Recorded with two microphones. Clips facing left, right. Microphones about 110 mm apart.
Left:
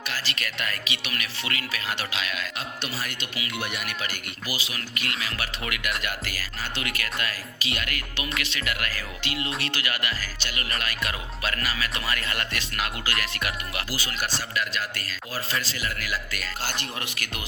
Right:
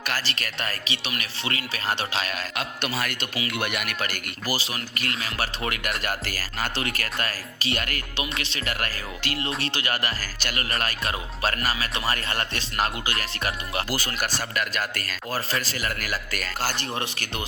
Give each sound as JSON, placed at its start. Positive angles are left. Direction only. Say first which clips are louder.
{"t": 0.0, "sound": "music", "louder": "right 3 dB", "side_deg": -45}
{"t": 2.6, "sound": "speech", "louder": "right 4 dB", "side_deg": -65}
{"t": 4.5, "sound": "music", "louder": "right 3 dB", "side_deg": -35}
{"t": 8.1, "sound": "music", "louder": "even", "side_deg": -25}
{"t": 14.0, "sound": "a man's voice", "louder": "right 2 dB", "side_deg": -50}
{"t": 16.9, "sound": "a man's voice", "louder": "right 4 dB", "side_deg": -30}